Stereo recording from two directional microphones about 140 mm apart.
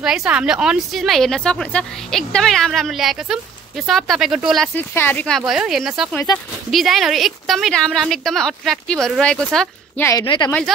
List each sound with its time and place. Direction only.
0.0 s a woman's voice: 5° right (ahead or behind)
4.7 s a woman's voice: 15° left (ahead or behind)
9.9 s a woman's voice: 20° left (ahead or behind)
10.2 s speech: 35° left (ahead or behind)